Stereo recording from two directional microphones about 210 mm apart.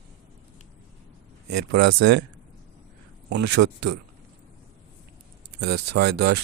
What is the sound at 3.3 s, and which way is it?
Speech, 55° right (ahead or behind).